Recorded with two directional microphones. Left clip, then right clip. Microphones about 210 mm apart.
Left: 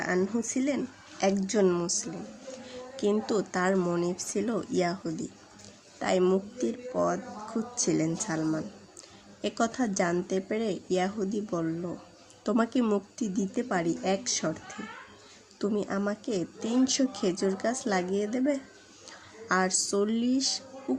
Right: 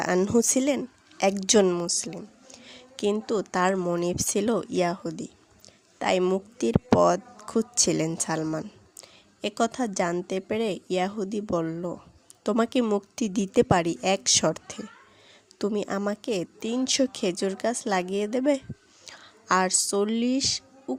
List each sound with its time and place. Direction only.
0.0 s speech: 40° right (ahead or behind)
1.7 s a woman's voice: 30° right (ahead or behind)